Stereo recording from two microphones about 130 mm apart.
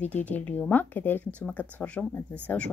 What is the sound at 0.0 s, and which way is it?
A woman's voice, 10° left (ahead or behind).